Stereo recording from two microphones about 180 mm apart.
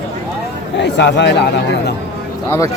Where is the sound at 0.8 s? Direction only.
75° left (ahead or behind).